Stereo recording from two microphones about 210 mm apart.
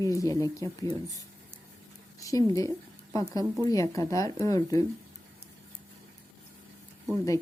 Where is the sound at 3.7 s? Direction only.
15° left (ahead or behind).